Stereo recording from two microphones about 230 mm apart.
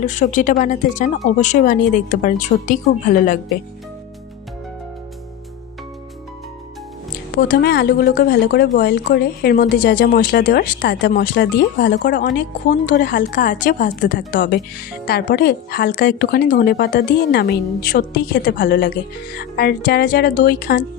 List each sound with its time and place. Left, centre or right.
0.0 s a woman's voice: left
7.5 s a woman's voice: left